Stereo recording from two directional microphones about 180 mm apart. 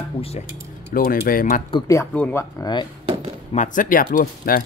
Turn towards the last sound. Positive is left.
turn(degrees=50)  # may be behind; listen again after turning